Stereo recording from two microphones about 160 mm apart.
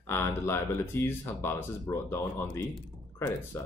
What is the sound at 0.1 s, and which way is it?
Speech, 15° left (ahead or behind).